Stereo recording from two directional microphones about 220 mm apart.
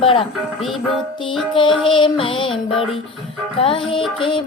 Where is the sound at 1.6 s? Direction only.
20° left (ahead or behind).